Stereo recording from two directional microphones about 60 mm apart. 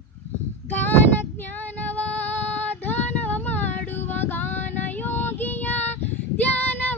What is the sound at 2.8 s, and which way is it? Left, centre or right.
Female singing, left.